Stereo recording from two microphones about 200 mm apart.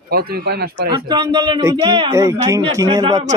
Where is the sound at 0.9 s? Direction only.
20° right (ahead or behind).